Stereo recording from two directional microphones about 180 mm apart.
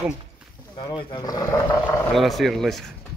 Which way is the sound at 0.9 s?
25° left (ahead or behind).